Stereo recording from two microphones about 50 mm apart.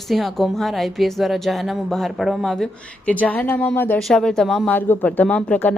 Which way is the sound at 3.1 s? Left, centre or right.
Left.